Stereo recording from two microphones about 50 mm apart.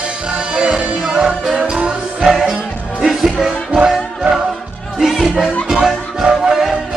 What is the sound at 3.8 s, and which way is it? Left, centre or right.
Music, centre.